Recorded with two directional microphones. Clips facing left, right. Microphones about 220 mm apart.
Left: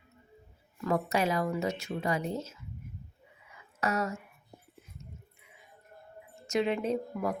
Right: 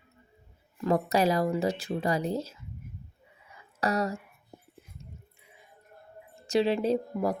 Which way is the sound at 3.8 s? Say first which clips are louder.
Right 3 dB; 35° right (ahead or behind).